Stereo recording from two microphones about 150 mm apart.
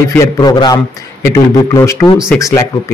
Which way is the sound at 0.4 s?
25° left (ahead or behind).